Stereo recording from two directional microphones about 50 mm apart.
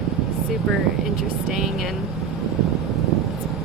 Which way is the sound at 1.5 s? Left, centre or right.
Centre.